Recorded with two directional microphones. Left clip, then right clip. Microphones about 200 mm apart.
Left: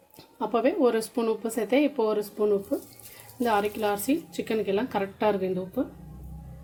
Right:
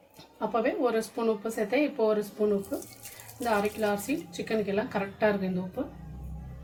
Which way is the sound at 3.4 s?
50° left (ahead or behind).